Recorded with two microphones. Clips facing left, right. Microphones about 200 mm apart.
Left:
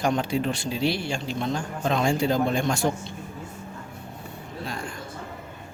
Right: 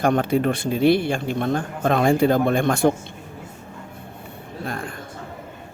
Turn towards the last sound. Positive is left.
turn(degrees=-55)  # may be behind; listen again after turning